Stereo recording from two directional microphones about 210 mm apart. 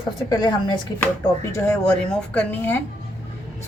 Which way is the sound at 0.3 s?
20° left (ahead or behind).